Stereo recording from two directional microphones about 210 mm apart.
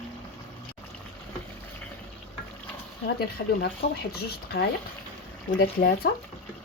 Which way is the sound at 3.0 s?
50° left (ahead or behind).